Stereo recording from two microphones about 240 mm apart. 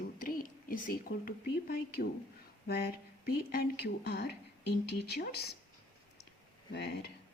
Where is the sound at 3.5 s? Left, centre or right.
Left.